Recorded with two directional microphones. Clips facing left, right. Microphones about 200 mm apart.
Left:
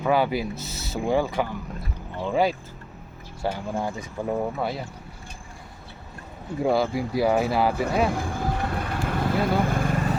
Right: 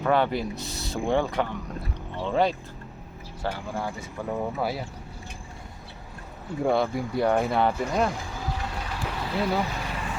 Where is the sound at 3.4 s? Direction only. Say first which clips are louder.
Left 3 dB; 15° left (ahead or behind).